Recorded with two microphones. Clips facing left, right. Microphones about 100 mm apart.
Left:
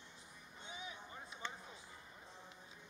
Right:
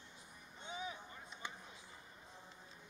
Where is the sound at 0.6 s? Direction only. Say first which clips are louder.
Right 5 dB; 35° right (ahead or behind).